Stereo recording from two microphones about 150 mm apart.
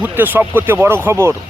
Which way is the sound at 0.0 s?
15° right (ahead or behind).